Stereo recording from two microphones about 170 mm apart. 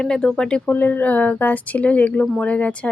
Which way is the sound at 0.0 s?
5° left (ahead or behind).